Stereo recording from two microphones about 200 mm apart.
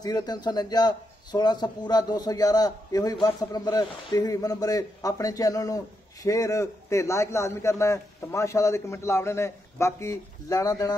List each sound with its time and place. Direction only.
0.0 s a man's voice: 20° left (ahead or behind)